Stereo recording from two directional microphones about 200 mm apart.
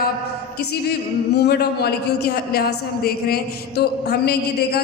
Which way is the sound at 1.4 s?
55° left (ahead or behind).